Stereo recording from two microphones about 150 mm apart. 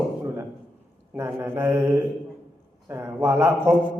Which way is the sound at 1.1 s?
15° right (ahead or behind).